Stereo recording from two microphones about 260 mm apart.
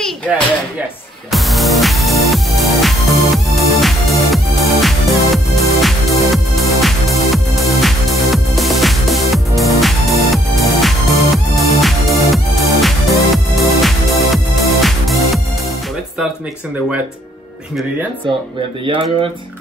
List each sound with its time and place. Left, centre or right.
1.3 s music: centre
18.9 s speech: right